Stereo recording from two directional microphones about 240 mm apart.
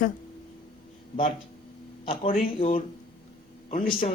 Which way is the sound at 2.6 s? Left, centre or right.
Left.